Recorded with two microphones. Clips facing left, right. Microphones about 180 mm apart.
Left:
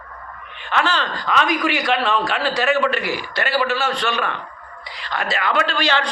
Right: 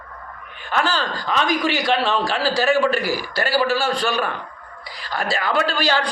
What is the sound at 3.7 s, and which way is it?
Speech, 10° right (ahead or behind).